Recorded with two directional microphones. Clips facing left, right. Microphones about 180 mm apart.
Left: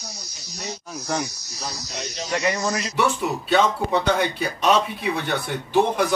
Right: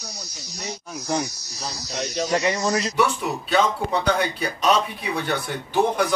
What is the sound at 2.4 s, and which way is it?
Speech, 20° right (ahead or behind).